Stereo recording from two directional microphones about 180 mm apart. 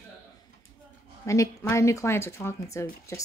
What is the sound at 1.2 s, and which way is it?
Speech, 15° left (ahead or behind).